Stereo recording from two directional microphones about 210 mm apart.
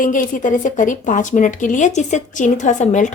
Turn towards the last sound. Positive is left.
turn(degrees=35)  # may be behind; listen again after turning